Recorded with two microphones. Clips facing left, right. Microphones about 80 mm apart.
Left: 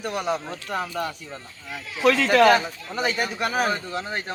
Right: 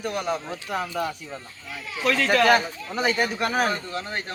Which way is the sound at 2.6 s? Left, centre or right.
Centre.